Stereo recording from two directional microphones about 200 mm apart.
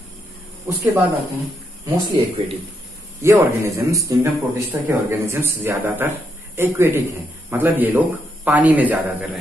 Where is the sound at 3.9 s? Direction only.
15° right (ahead or behind).